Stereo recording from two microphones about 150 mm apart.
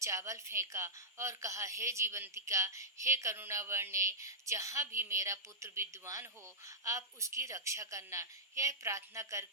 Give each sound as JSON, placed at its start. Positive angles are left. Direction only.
{"t": 0.0, "sound": "a woman's voice", "side_deg": -20}